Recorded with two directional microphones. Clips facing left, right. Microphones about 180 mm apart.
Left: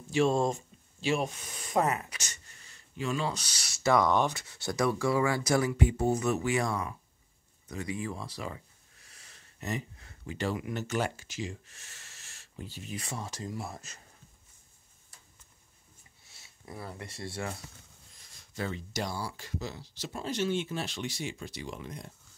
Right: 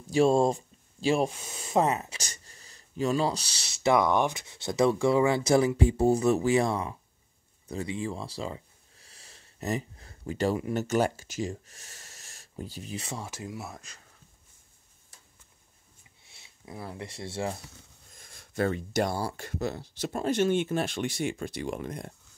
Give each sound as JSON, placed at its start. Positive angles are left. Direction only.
{"t": 0.1, "sound": "speech", "side_deg": -35}
{"t": 13.0, "sound": "speech", "side_deg": -15}
{"t": 16.3, "sound": "speech", "side_deg": -20}
{"t": 18.1, "sound": "speech", "side_deg": -55}